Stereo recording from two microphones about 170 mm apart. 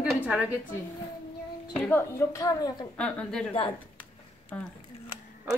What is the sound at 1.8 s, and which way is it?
A woman's voice, 15° left (ahead or behind).